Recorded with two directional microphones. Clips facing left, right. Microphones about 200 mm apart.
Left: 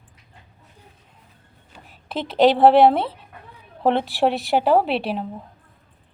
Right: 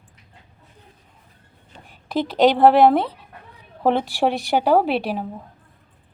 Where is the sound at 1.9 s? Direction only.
Centre (ahead or behind).